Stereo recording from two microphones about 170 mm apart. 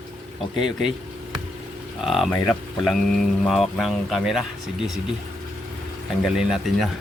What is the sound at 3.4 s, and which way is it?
Speech, centre (ahead or behind).